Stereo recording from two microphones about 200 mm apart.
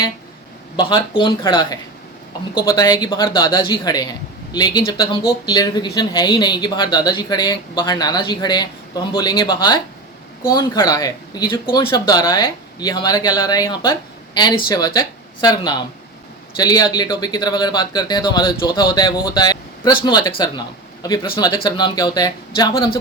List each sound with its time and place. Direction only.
0.8 s speech: 25° left (ahead or behind)